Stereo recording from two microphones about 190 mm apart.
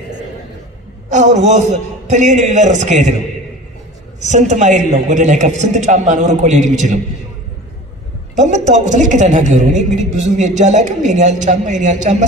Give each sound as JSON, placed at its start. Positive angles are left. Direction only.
{"t": 1.0, "sound": "a woman's voice", "side_deg": -40}
{"t": 4.3, "sound": "a woman's voice", "side_deg": -40}
{"t": 8.4, "sound": "a woman's voice", "side_deg": -40}